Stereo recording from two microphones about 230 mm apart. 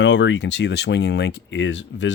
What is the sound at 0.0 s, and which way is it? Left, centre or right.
Speech, left.